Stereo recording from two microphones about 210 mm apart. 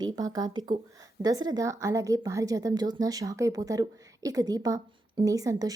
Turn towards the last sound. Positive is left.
turn(degrees=-15)  # may be behind; listen again after turning